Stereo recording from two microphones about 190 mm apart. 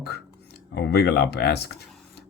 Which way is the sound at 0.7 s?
55° left (ahead or behind).